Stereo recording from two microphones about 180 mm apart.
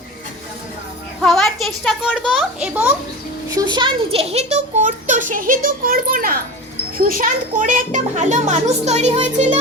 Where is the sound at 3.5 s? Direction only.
25° right (ahead or behind).